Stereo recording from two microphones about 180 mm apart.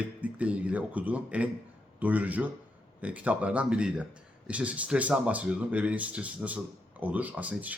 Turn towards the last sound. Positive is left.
turn(degrees=-10)  # may be behind; listen again after turning